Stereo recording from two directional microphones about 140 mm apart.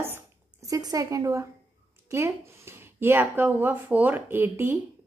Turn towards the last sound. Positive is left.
turn(degrees=-15)  # may be behind; listen again after turning